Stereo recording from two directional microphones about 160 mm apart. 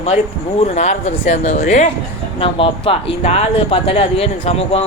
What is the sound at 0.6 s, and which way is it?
Speech, 45° left (ahead or behind).